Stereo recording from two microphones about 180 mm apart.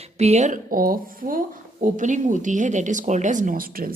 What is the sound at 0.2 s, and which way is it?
Speech, 40° right (ahead or behind).